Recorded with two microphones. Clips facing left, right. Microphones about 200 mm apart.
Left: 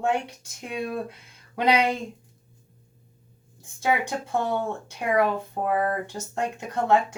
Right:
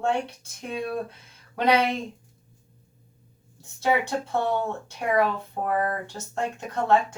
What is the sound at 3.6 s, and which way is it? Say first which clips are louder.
Speech: right 1 dB; 15° left (ahead or behind).